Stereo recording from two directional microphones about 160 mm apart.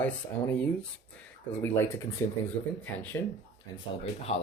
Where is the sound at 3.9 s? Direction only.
40° left (ahead or behind).